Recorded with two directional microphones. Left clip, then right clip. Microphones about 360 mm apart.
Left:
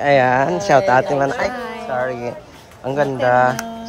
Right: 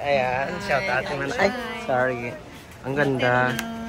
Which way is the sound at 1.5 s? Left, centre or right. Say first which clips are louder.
Left 3 dB; left.